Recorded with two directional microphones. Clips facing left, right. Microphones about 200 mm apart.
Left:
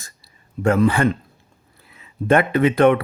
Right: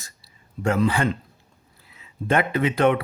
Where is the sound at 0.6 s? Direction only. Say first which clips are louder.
Left 5 dB; 55° left (ahead or behind).